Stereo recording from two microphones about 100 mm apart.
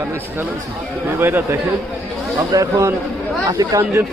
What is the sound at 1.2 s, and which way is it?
Speech, 20° right (ahead or behind).